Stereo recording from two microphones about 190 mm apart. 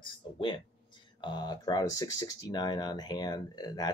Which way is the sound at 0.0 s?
25° left (ahead or behind).